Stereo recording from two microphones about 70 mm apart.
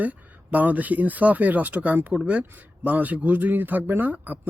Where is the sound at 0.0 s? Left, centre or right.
Right.